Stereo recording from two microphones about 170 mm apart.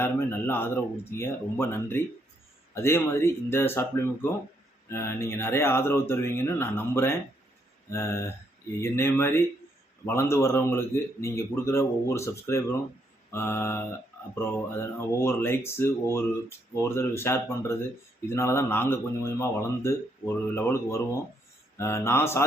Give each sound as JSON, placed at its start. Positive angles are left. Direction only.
{"t": 0.0, "sound": "speech", "side_deg": 15}
{"t": 21.8, "sound": "speech", "side_deg": 15}